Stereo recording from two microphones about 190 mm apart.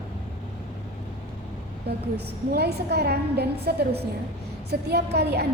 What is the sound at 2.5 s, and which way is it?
A woman's voice, 60° right (ahead or behind).